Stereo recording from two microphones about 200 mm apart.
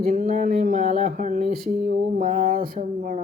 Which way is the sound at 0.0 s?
40° right (ahead or behind).